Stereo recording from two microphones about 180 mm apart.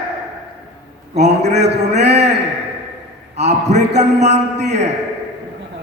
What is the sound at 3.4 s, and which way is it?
Speech, 65° right (ahead or behind).